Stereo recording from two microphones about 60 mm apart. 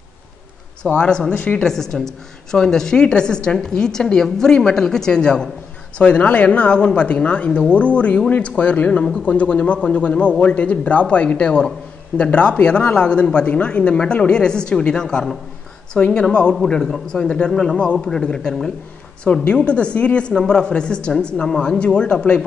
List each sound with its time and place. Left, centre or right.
0.9 s a man's voice: centre
18.0 s speech: centre